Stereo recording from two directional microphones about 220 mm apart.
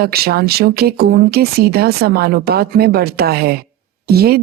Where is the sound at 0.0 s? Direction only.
45° right (ahead or behind).